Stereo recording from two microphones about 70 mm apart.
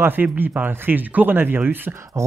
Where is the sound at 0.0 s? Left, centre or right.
Right.